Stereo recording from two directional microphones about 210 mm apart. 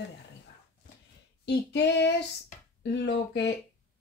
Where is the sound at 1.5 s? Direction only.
55° left (ahead or behind).